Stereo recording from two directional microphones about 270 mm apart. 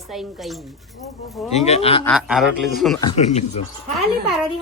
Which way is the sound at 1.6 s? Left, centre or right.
Left.